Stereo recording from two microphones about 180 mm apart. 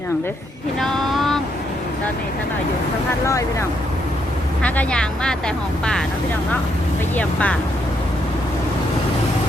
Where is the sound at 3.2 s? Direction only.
15° left (ahead or behind).